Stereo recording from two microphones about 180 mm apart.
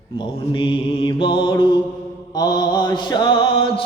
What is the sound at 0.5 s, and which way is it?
Mantra, 30° left (ahead or behind).